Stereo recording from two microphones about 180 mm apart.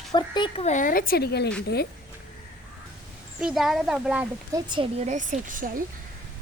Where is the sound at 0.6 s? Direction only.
45° left (ahead or behind); by 1.9 s 60° left (ahead or behind).